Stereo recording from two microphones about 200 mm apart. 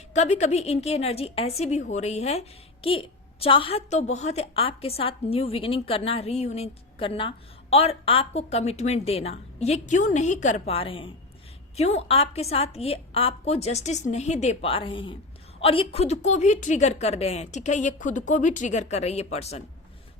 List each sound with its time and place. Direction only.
0.1 s a woman's voice: 35° left (ahead or behind)